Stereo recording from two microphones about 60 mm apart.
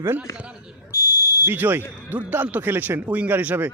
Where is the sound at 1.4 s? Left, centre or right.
Right.